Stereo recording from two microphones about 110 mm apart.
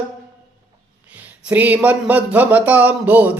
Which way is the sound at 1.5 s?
15° right (ahead or behind).